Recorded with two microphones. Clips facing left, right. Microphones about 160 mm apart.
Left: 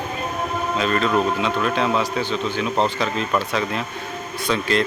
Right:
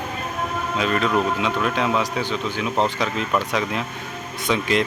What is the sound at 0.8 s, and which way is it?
Speech, 10° right (ahead or behind).